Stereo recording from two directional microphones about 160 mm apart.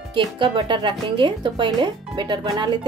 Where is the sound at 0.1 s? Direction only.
30° right (ahead or behind).